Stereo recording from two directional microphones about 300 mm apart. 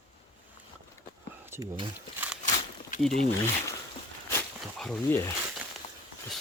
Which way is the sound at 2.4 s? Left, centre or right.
Left.